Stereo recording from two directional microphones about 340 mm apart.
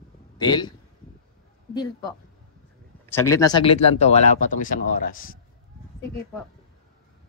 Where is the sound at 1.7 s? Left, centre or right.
Centre.